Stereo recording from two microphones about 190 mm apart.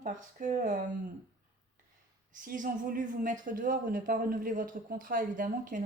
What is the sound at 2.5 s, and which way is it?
Speech, 50° right (ahead or behind).